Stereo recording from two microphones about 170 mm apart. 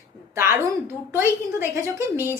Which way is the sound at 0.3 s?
15° right (ahead or behind).